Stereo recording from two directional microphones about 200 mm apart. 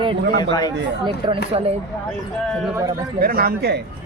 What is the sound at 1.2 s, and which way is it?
Speech, 20° right (ahead or behind).